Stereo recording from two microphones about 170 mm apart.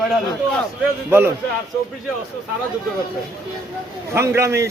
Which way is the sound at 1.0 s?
15° right (ahead or behind).